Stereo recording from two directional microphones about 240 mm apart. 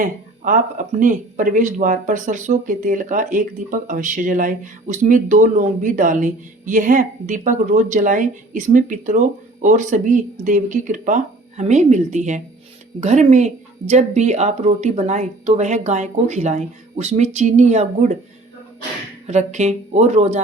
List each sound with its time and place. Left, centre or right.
0.0 s speech: right
19.3 s speech: right